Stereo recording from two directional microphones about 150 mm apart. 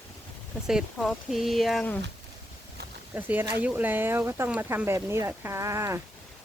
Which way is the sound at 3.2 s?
15° right (ahead or behind).